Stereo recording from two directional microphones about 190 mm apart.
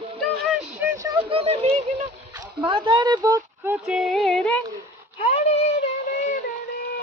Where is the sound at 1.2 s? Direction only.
30° right (ahead or behind).